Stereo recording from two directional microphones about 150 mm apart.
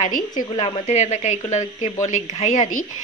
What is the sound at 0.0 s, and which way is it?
Speech, 60° left (ahead or behind).